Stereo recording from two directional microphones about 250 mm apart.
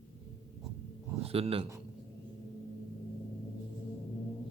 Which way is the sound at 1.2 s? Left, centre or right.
Right.